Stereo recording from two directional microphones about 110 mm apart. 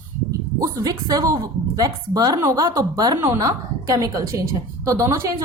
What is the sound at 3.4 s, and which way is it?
A woman's voice, 35° right (ahead or behind).